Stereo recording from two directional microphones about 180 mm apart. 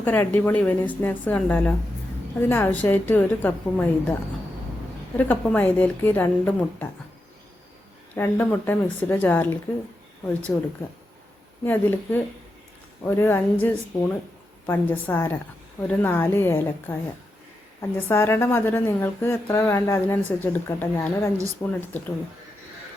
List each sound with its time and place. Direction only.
0.0 s a woman's voice: 10° left (ahead or behind)
5.1 s a woman's voice: 10° left (ahead or behind)
8.1 s a woman's voice: 10° left (ahead or behind)
11.6 s a woman's voice: 10° left (ahead or behind)